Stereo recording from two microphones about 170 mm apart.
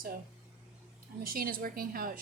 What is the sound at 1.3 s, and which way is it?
Speech, 60° right (ahead or behind).